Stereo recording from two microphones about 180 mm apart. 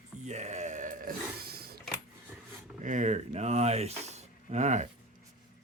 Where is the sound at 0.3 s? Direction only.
40° right (ahead or behind); by 1.8 s 60° right (ahead or behind).